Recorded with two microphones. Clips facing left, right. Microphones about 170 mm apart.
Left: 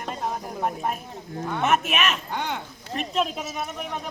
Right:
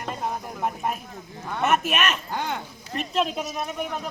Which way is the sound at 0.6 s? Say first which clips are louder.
Even; centre (ahead or behind).